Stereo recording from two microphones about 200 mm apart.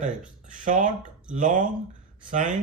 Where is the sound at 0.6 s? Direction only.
40° right (ahead or behind).